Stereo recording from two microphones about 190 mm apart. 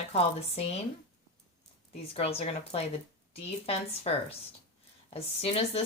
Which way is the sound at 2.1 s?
35° left (ahead or behind).